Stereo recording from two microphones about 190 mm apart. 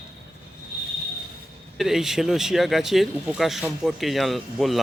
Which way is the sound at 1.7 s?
Centre (ahead or behind).